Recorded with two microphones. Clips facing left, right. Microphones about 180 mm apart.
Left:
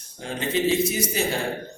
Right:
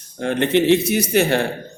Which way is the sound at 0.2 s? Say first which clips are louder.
Right 8 dB; 65° right (ahead or behind).